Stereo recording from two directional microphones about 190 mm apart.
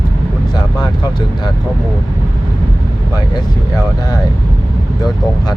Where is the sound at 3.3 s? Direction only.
20° left (ahead or behind).